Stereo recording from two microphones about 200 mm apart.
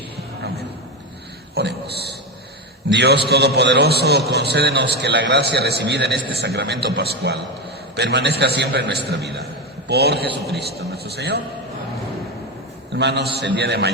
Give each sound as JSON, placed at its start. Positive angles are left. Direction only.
{"t": 1.5, "sound": "a sound", "side_deg": -55}
{"t": 2.9, "sound": "a man's voice", "side_deg": -55}
{"t": 13.0, "sound": "a man's voice", "side_deg": -60}